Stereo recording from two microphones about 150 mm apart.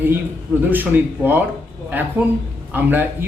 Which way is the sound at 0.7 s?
15° right (ahead or behind).